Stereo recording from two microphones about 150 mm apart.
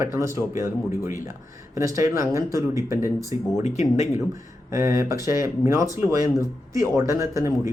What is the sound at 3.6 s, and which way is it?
Speech, 50° left (ahead or behind).